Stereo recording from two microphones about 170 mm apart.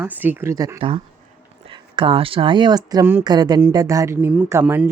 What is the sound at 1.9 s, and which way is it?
Speech, 30° right (ahead or behind).